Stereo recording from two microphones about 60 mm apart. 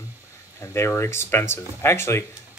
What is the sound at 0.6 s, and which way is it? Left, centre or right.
Speech, left.